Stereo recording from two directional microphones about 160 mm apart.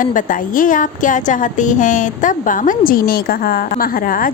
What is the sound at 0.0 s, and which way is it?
A woman's voice, 55° left (ahead or behind).